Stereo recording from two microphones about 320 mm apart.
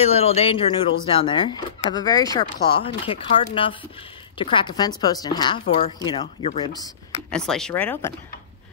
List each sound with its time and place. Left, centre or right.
0.0 s speech: centre
7.2 s speech: centre